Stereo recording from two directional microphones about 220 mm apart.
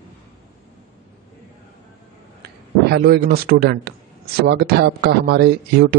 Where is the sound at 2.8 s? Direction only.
45° right (ahead or behind).